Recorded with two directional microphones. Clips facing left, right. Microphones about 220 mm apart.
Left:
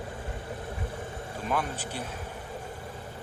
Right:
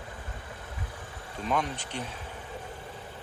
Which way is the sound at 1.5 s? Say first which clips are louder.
Right 1 dB; 5° left (ahead or behind).